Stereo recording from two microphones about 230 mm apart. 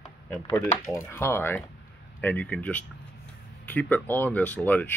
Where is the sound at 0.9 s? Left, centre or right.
Centre.